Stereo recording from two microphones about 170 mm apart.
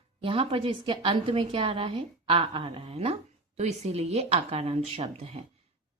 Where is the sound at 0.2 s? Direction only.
30° right (ahead or behind).